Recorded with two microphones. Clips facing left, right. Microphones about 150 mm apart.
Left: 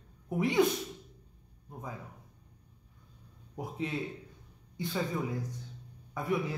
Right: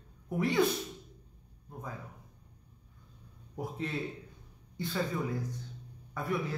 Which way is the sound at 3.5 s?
15° left (ahead or behind).